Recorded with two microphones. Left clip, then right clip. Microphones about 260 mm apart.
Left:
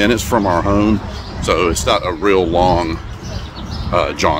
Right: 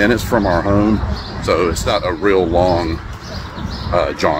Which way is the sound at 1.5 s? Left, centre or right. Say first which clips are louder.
Left 1 dB; centre.